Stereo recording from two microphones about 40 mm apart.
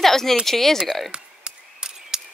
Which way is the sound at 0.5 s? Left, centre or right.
Centre.